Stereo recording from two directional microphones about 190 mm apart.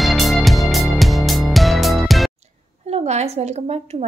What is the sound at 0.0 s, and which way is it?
Music, centre (ahead or behind).